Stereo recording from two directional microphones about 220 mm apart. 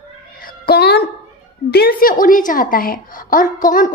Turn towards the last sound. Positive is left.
turn(degrees=40)  # may be behind; listen again after turning